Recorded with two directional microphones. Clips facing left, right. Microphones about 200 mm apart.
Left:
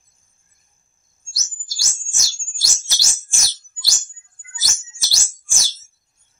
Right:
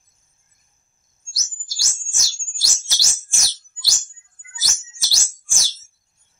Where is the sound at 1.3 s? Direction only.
50° left (ahead or behind).